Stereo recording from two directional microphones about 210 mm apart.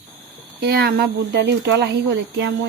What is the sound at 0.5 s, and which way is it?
Speech, 50° right (ahead or behind).